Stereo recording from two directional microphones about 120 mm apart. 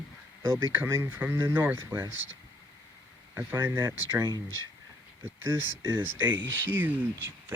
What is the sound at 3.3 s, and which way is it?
Speech, 20° right (ahead or behind).